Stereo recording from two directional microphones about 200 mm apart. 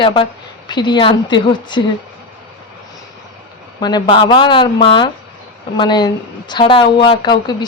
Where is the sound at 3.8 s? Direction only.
25° left (ahead or behind).